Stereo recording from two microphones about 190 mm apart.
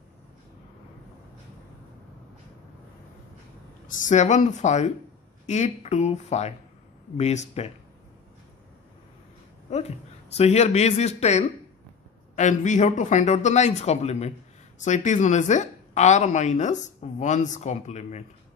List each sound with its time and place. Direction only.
4.1 s speech: 40° left (ahead or behind)
9.7 s speech: 35° left (ahead or behind)